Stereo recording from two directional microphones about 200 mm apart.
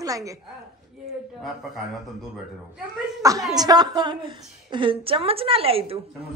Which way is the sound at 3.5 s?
20° right (ahead or behind).